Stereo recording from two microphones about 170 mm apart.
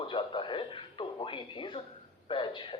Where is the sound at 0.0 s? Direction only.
30° left (ahead or behind).